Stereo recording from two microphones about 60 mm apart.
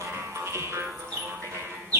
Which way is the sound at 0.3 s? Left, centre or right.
Right.